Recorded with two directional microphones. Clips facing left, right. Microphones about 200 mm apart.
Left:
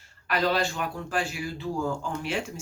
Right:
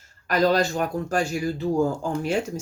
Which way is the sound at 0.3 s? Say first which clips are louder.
Right 5 dB; 40° right (ahead or behind).